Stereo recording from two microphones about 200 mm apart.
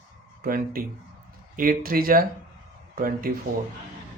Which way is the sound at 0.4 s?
45° right (ahead or behind).